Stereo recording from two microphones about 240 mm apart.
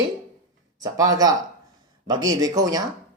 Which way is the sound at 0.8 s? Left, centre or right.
Centre.